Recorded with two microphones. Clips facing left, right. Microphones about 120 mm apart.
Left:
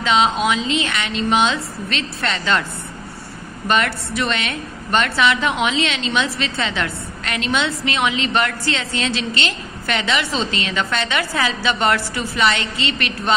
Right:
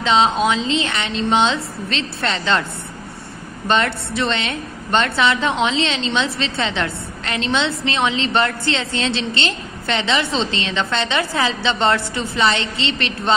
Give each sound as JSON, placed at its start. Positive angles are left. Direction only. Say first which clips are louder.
{"t": 0.0, "sound": "a woman's voice", "louder": "right 1 dB", "side_deg": -30}
{"t": 3.6, "sound": "a woman's voice", "louder": "right 1 dB", "side_deg": -30}